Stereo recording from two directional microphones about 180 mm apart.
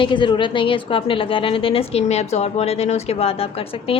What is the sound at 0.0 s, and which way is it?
A woman's voice, 25° left (ahead or behind).